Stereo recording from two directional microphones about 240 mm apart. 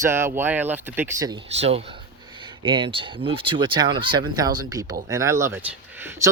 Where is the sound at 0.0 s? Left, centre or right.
Centre.